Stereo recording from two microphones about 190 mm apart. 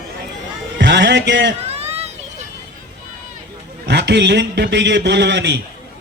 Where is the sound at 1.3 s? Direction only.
70° right (ahead or behind).